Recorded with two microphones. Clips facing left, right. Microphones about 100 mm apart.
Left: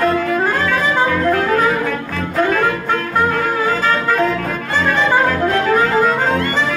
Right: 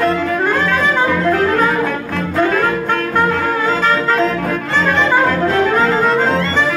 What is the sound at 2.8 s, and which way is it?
Music, 5° left (ahead or behind).